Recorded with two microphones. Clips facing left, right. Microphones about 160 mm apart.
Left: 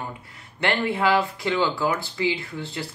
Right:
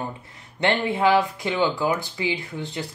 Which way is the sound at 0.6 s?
20° right (ahead or behind).